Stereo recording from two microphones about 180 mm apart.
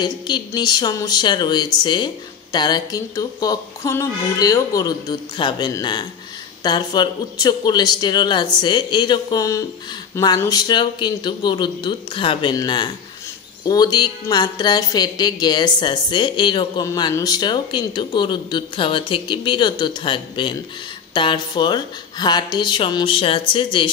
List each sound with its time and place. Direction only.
0.0 s speech: 25° left (ahead or behind)